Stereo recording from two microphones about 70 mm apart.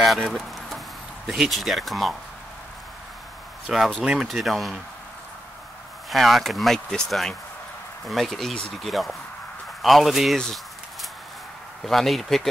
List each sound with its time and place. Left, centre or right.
0.0 s a sound: centre
0.7 s music: centre
3.6 s speech: centre
4.3 s speech: centre
6.0 s speech: centre